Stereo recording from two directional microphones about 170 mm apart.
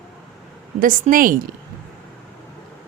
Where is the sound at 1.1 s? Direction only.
55° right (ahead or behind).